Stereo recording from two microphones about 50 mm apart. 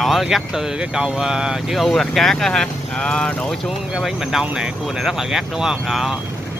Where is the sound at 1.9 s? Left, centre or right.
Centre.